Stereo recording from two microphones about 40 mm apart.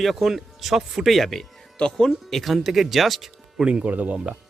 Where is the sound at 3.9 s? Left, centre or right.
Right.